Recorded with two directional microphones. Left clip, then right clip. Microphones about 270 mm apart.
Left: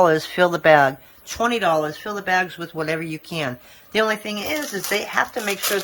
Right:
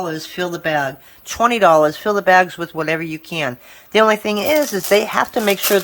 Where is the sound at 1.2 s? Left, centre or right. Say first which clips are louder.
Right 7 dB; centre.